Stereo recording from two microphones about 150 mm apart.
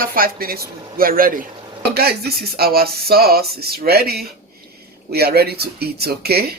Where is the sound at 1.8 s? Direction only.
90° right.